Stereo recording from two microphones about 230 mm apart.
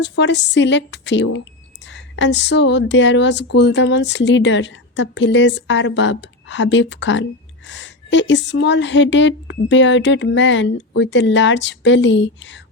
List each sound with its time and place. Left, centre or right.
0.0 s speech: left